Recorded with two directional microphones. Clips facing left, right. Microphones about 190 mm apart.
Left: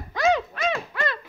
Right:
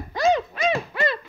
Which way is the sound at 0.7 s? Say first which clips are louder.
Right 4 dB; 10° right (ahead or behind).